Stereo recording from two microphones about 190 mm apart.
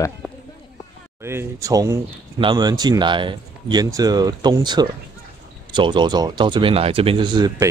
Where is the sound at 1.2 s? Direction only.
15° right (ahead or behind).